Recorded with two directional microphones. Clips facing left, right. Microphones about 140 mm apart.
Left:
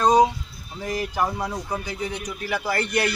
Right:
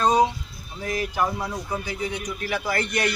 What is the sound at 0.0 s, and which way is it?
Music, 15° left (ahead or behind).